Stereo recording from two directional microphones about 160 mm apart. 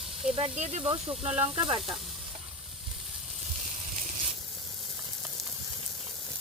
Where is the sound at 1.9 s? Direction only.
Centre (ahead or behind).